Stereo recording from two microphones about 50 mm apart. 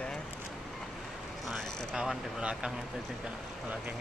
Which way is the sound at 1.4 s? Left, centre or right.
Centre.